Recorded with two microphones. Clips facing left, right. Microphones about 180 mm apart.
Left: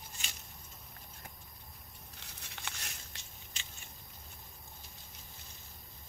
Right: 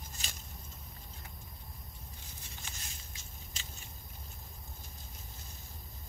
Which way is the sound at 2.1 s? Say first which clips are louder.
Even; 70° left (ahead or behind).